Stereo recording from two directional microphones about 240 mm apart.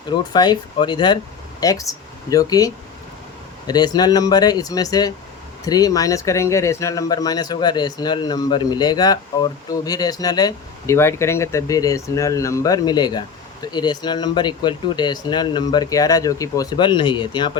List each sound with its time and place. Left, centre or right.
0.3 s speech: centre